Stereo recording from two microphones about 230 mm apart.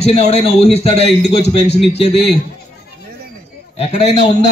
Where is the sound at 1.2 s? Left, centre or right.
Left.